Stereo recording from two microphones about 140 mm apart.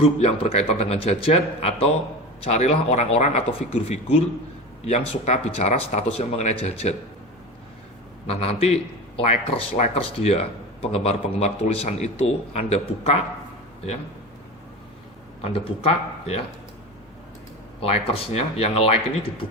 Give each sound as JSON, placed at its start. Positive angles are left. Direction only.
{"t": 0.0, "sound": "a man's voice", "side_deg": 45}
{"t": 8.3, "sound": "a man's voice", "side_deg": 45}
{"t": 15.4, "sound": "a man's voice", "side_deg": 45}
{"t": 17.7, "sound": "a man's voice", "side_deg": 45}